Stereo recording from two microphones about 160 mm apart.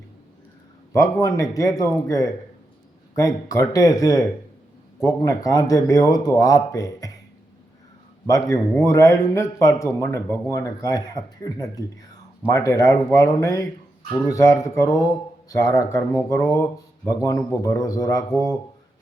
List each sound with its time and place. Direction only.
0.9 s a man's voice: 20° left (ahead or behind)
8.3 s a man's voice: 20° left (ahead or behind)